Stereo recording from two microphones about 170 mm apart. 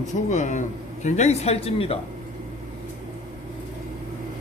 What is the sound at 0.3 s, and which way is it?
Speech, 45° left (ahead or behind).